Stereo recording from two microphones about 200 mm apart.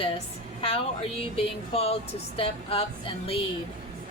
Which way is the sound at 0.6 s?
30° left (ahead or behind).